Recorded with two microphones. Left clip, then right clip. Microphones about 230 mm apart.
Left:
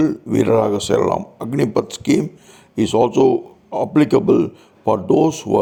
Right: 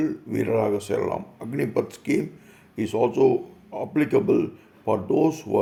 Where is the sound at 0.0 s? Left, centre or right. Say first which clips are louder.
Left 9 dB; left.